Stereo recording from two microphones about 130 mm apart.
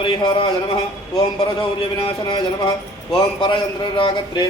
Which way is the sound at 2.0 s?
35° left (ahead or behind).